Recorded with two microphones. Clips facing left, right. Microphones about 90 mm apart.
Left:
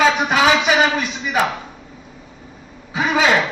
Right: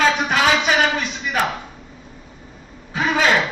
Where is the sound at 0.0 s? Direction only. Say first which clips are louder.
Left 2 dB; 5° left (ahead or behind).